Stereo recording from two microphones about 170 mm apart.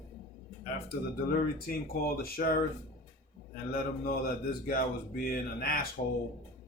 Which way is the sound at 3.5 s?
60° left (ahead or behind).